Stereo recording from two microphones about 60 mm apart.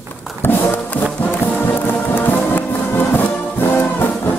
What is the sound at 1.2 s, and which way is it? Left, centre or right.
Music, left.